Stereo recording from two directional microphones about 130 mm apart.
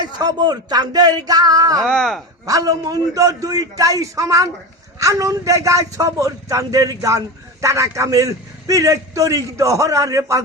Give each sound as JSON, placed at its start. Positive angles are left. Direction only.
{"t": 0.2, "sound": "speech", "side_deg": -30}
{"t": 1.8, "sound": "speech", "side_deg": 5}
{"t": 2.5, "sound": "a man's voice", "side_deg": -25}